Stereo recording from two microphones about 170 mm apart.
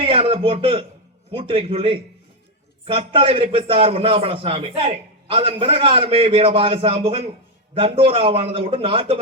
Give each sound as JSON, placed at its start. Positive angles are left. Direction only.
{"t": 0.0, "sound": "a man's voice", "side_deg": -35}